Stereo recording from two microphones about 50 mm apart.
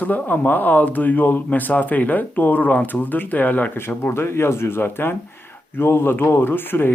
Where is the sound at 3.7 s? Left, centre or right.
Left.